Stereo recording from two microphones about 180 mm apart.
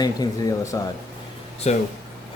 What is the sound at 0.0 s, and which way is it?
Speech, 20° left (ahead or behind).